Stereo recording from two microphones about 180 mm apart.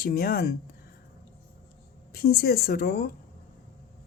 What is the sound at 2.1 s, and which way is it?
Speech, 60° left (ahead or behind).